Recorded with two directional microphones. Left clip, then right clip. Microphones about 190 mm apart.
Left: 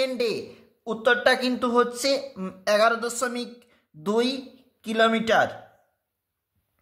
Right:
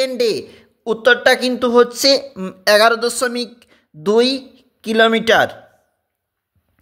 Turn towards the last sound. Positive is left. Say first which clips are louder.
# right 8 dB
turn(degrees=-40)  # may be behind; listen again after turning